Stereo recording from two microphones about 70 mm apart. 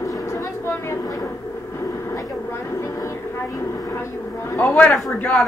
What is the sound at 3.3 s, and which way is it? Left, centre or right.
Speech, left.